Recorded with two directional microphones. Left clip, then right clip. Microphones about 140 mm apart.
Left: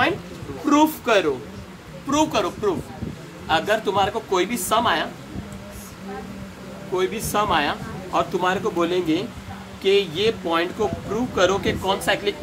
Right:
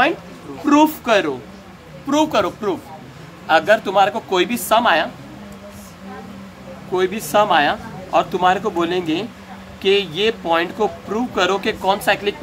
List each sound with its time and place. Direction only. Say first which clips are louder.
0.7 s a woman's voice: right 4 dB; 75° right (ahead or behind)
2.0 s a man's voice: right 4 dB; 90° right
7.0 s a man's voice: right 6 dB; 90° right